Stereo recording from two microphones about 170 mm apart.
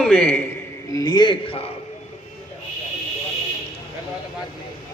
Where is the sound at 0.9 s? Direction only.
25° left (ahead or behind).